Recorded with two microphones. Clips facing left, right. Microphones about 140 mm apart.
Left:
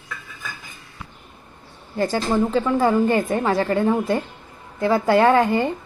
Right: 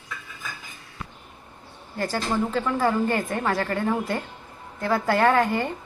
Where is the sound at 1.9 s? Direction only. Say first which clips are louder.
Left 5 dB; 20° left (ahead or behind).